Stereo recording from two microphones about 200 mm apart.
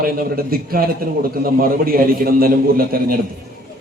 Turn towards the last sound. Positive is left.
turn(degrees=-45)  # may be behind; listen again after turning